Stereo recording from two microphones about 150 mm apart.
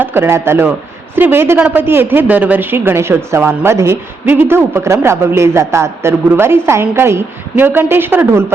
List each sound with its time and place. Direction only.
0.0 s a man's voice: 15° right (ahead or behind)